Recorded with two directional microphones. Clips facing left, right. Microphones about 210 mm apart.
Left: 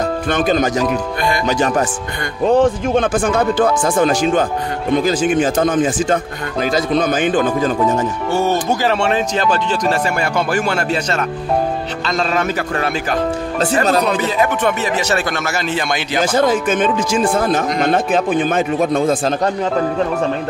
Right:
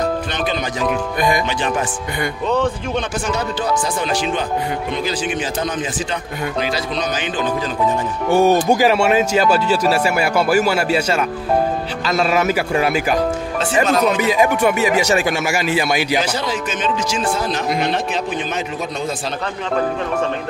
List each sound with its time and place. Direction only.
0.3 s speech: 45° left (ahead or behind)
2.4 s speech: 50° left (ahead or behind)
8.3 s speech: 15° right (ahead or behind)
13.8 s speech: 35° left (ahead or behind)
14.2 s speech: 10° right (ahead or behind)
16.2 s speech: 50° left (ahead or behind)